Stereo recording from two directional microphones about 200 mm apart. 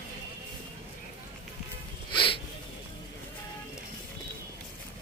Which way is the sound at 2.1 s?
25° left (ahead or behind).